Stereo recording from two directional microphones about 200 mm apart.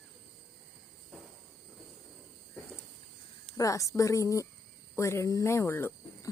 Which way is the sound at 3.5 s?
15° left (ahead or behind).